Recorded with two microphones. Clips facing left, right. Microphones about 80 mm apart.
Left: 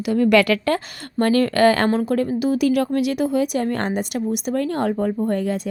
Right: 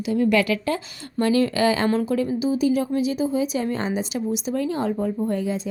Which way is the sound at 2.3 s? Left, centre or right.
Left.